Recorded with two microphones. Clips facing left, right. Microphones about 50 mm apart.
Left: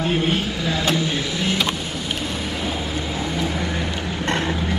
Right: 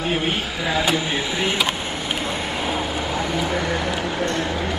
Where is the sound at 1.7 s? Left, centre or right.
Right.